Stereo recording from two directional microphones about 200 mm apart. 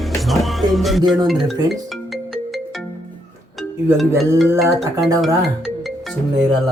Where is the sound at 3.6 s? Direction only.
Centre (ahead or behind).